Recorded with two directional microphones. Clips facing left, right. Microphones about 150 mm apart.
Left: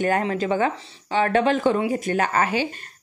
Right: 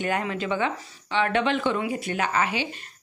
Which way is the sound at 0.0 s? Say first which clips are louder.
Left 5 dB; 40° left (ahead or behind).